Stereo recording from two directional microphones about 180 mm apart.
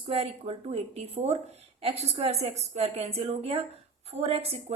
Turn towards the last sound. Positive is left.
turn(degrees=-35)  # may be behind; listen again after turning